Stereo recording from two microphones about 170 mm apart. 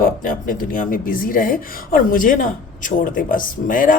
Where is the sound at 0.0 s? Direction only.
55° left (ahead or behind).